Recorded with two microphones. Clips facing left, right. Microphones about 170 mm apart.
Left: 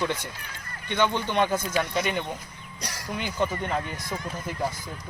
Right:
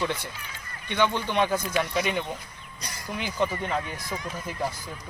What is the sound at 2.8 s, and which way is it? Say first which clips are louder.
Crow: left 3 dB; 90° left.